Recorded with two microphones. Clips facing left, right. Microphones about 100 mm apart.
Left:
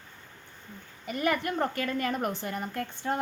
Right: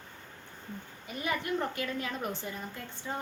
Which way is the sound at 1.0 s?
65° left (ahead or behind).